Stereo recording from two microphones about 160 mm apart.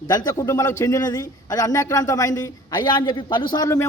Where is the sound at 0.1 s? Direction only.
25° left (ahead or behind).